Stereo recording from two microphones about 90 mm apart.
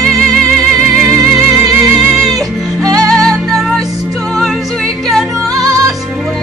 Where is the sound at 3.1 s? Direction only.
5° left (ahead or behind).